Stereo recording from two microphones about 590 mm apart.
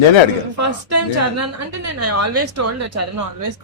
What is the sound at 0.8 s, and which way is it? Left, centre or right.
A woman's voice, right.